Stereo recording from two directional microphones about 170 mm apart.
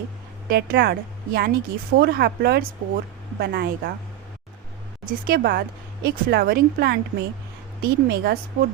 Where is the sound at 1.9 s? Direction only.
65° right (ahead or behind).